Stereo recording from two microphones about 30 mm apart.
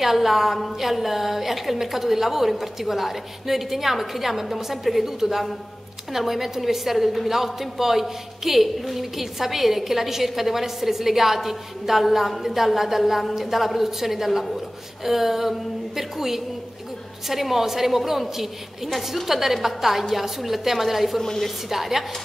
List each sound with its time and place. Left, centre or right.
0.0 s a woman's voice: centre
21.2 s a woman's voice: centre
21.6 s a woman's voice: centre